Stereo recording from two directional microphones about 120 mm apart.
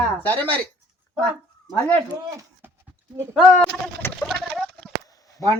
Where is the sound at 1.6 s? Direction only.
15° left (ahead or behind).